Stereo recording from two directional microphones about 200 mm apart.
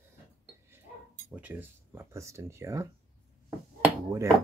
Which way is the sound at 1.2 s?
10° right (ahead or behind).